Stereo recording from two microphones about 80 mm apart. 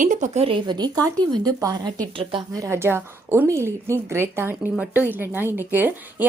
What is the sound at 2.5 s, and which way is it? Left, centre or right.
A woman's voice, right.